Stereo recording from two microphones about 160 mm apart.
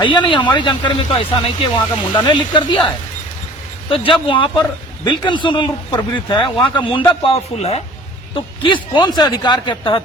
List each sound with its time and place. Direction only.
0.0 s speech: 30° left (ahead or behind)
3.8 s speech: 35° left (ahead or behind)
8.6 s speech: 30° left (ahead or behind)